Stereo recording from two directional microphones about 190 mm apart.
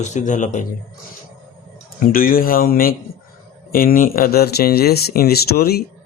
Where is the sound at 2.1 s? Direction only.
50° left (ahead or behind).